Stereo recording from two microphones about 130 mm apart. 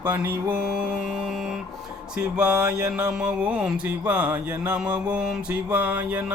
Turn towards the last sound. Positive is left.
turn(degrees=-10)  # may be behind; listen again after turning